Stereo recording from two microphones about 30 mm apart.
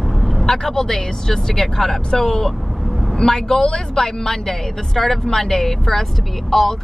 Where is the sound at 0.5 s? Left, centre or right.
Centre.